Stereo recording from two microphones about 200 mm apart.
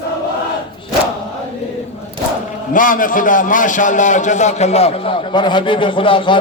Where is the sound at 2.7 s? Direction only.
45° left (ahead or behind).